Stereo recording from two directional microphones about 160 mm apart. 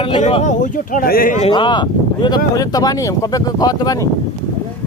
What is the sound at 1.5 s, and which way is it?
Speech, 30° left (ahead or behind).